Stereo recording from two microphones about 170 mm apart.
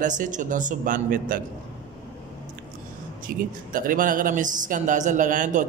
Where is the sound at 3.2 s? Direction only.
55° right (ahead or behind).